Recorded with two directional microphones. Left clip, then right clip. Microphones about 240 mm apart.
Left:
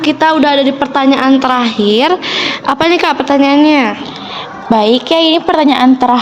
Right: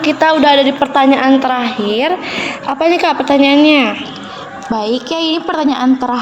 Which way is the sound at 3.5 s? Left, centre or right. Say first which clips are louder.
Left 1 dB; centre.